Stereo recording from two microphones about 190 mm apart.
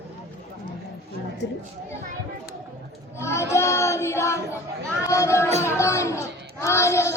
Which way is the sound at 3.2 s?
15° left (ahead or behind).